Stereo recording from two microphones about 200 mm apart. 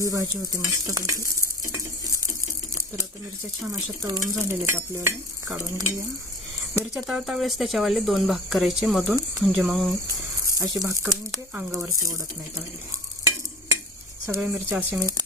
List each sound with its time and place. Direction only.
0.0 s stir: 15° right (ahead or behind)
3.7 s stir: 15° right (ahead or behind)
6.9 s speech: 5° right (ahead or behind)
10.6 s stir: 15° right (ahead or behind)
14.3 s stir: 10° right (ahead or behind)